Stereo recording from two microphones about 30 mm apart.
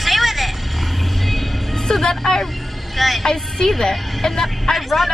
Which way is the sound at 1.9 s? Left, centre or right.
Centre.